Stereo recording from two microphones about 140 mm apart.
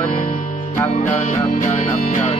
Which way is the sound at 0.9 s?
55° left (ahead or behind).